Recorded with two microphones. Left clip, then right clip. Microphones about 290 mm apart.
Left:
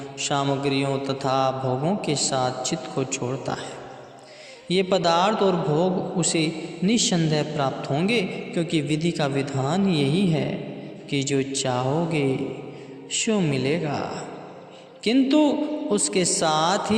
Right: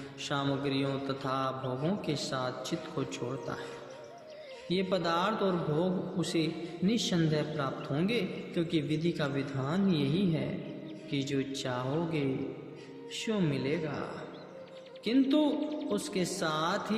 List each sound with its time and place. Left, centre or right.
0.2 s a man's voice: left
4.7 s a man's voice: left